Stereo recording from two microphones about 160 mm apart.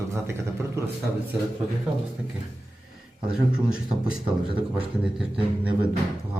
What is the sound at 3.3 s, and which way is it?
Speech, 5° right (ahead or behind).